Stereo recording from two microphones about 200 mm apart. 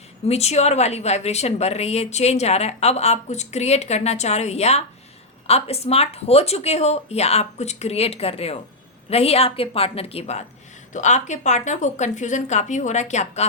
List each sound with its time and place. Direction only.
0.3 s a woman's voice: 30° left (ahead or behind)